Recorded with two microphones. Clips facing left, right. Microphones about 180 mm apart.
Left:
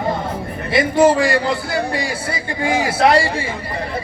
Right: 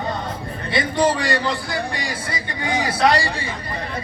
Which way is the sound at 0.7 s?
25° left (ahead or behind).